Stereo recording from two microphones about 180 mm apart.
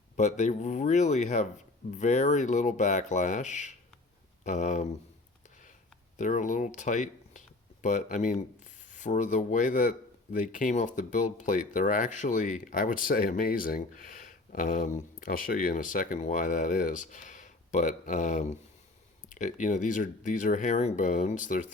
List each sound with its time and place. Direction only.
0.2 s speech: 40° left (ahead or behind)
6.1 s speech: 45° left (ahead or behind)